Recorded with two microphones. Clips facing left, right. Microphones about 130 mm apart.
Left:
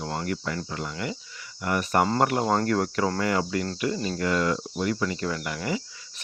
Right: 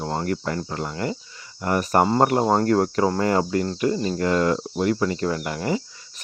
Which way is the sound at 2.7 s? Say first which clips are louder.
Right 5 dB; 35° right (ahead or behind).